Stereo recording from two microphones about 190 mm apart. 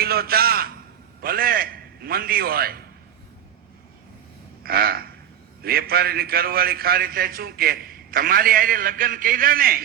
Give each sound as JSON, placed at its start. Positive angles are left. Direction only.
{"t": 0.0, "sound": "a man's voice", "side_deg": -55}
{"t": 4.6, "sound": "a sound", "side_deg": -50}
{"t": 5.6, "sound": "a man's voice", "side_deg": -55}